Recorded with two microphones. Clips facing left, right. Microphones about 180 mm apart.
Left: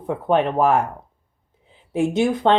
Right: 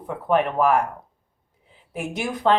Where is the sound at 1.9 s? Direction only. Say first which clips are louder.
Left 9 dB; 25° left (ahead or behind).